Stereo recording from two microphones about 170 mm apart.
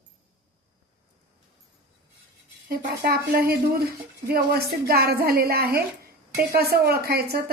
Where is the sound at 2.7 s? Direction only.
65° right (ahead or behind).